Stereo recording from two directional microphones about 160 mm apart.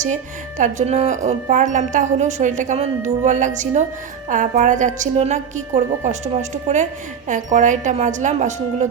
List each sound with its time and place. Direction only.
0.6 s a woman's voice: 45° right (ahead or behind)